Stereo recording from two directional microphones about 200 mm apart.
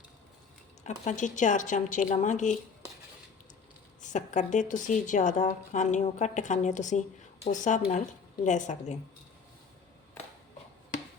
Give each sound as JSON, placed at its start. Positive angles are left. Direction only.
{"t": 0.9, "sound": "a woman's voice", "side_deg": 40}
{"t": 4.0, "sound": "a woman's voice", "side_deg": 40}